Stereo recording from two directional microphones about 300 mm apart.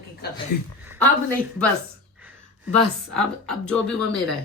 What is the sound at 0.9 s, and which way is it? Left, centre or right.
Speech, centre.